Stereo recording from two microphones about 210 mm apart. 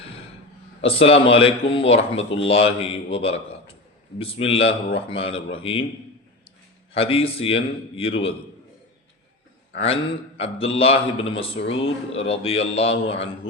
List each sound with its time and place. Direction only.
0.8 s a man's voice: 25° left (ahead or behind)
6.9 s a man's voice: 25° left (ahead or behind)
9.7 s a man's voice: 30° left (ahead or behind)